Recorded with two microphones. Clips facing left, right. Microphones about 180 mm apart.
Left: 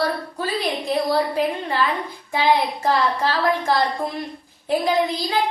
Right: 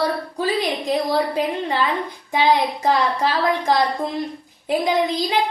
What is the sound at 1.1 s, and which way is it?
A woman's voice, 20° right (ahead or behind).